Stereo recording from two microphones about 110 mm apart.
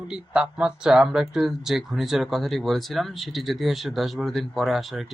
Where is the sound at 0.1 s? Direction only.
5° right (ahead or behind).